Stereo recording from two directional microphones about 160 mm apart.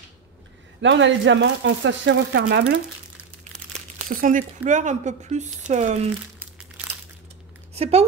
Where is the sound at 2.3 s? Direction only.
90° right.